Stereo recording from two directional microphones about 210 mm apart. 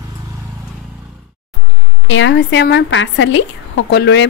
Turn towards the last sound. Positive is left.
turn(degrees=55)  # may be behind; listen again after turning